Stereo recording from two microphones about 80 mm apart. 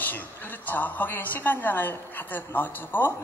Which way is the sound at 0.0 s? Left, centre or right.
Left.